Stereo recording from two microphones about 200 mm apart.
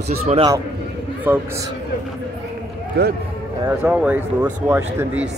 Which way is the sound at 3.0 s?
55° right (ahead or behind).